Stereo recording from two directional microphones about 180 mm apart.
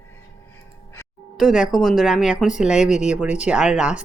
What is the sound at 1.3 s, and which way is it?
A woman's voice, centre (ahead or behind).